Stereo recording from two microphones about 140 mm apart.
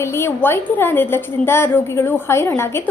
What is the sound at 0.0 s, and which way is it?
A woman's voice, 20° left (ahead or behind).